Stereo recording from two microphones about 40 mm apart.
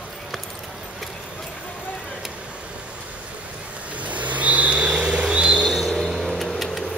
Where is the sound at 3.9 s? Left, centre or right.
Right.